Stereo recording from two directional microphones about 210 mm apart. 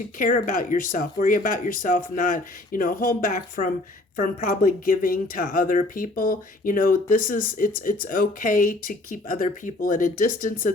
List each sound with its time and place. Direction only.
0.2 s speech: 40° left (ahead or behind)